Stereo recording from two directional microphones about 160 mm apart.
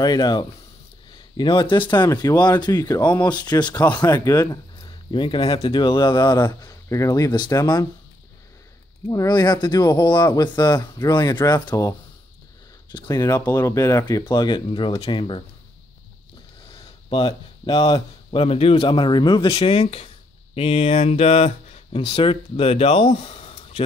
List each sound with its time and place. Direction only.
0.0 s speech: 25° left (ahead or behind)
9.1 s speech: 20° left (ahead or behind)
12.9 s speech: 25° left (ahead or behind)
16.7 s a sound: 35° left (ahead or behind)
18.3 s speech: 35° left (ahead or behind)